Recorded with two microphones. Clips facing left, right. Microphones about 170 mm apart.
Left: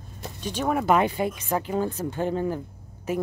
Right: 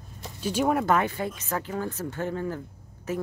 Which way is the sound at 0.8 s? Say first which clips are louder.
Left 3 dB; 15° left (ahead or behind).